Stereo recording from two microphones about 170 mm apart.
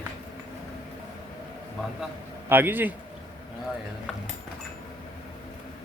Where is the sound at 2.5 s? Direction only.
10° right (ahead or behind).